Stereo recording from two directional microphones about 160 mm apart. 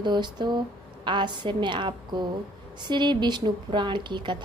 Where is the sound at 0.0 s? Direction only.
25° right (ahead or behind).